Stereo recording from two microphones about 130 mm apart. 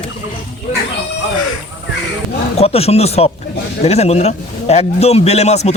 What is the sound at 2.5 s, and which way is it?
A man's voice, 50° left (ahead or behind).